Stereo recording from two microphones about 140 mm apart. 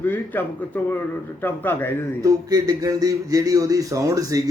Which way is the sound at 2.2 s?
25° right (ahead or behind).